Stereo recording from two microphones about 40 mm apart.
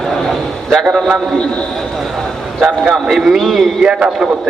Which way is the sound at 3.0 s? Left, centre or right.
Centre.